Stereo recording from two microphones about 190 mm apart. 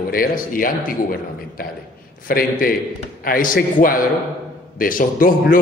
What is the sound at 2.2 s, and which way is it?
A man's voice, 50° left (ahead or behind).